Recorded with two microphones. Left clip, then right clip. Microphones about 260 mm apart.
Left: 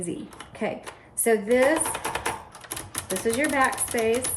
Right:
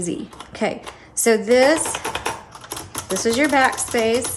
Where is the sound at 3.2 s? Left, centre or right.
Centre.